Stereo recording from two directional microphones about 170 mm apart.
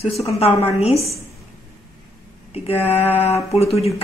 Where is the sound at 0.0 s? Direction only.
40° left (ahead or behind).